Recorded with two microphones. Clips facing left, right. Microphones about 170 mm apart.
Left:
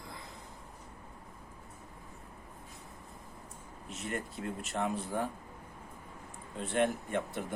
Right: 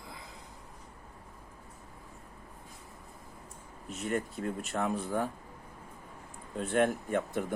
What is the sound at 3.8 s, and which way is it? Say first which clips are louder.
Speech: right 5 dB; centre (ahead or behind).